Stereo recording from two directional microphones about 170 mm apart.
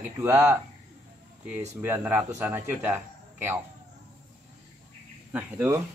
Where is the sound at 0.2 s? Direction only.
10° right (ahead or behind).